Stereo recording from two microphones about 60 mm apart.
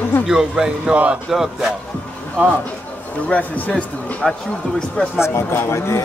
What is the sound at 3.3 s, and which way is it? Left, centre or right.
Speech, left.